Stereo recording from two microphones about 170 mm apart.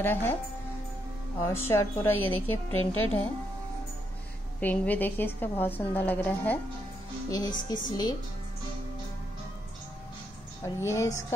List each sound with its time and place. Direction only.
0.0 s a woman's voice: 10° left (ahead or behind)
1.7 s a woman's voice: 15° left (ahead or behind)
4.6 s a woman's voice: 10° left (ahead or behind)
7.2 s speech: 25° left (ahead or behind)
10.6 s a woman's voice: 15° left (ahead or behind)